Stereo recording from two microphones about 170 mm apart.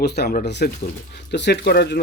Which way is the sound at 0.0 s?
75° left (ahead or behind).